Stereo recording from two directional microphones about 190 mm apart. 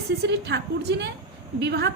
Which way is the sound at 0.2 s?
60° right (ahead or behind).